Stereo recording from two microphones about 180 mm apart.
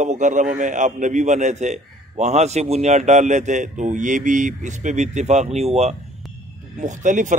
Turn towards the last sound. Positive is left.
turn(degrees=-45)  # may be behind; listen again after turning